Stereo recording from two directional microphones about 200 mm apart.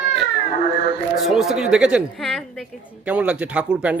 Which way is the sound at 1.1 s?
Centre (ahead or behind).